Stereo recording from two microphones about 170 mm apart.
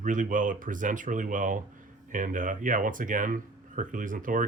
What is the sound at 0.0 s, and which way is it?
Speech, 50° right (ahead or behind).